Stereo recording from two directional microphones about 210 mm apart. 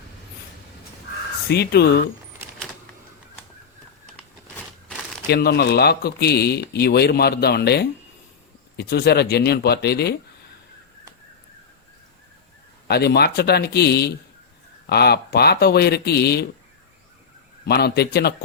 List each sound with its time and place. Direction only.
1.5 s speech: 50° left (ahead or behind)
5.3 s speech: 50° left (ahead or behind)
12.9 s speech: 50° left (ahead or behind)
17.7 s speech: 50° left (ahead or behind)